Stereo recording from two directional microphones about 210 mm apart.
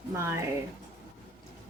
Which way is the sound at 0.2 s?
15° right (ahead or behind).